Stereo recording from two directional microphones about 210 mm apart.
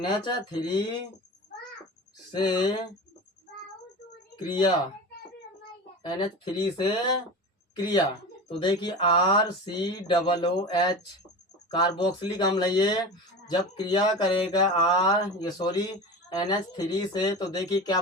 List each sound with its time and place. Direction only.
0.0 s speech: 20° left (ahead or behind)
2.3 s speech: 20° left (ahead or behind)
4.4 s speech: 20° left (ahead or behind)
6.0 s speech: 20° left (ahead or behind)
8.4 s speech: 25° left (ahead or behind)